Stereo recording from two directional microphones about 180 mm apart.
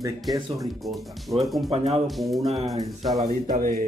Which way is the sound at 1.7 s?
35° right (ahead or behind).